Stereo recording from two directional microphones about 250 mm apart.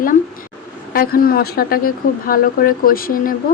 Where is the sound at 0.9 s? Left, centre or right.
Left.